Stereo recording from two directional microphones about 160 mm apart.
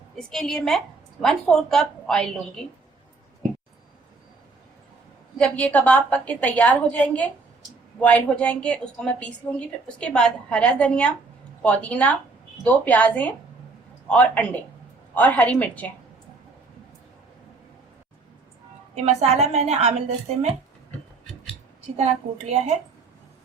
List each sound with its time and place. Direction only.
0.2 s a woman's voice: centre (ahead or behind)
5.4 s a woman's voice: 10° left (ahead or behind)
18.9 s a woman's voice: 40° right (ahead or behind)
22.3 s a woman's voice: 45° right (ahead or behind)